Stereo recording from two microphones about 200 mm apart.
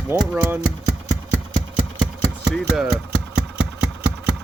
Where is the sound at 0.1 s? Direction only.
10° right (ahead or behind).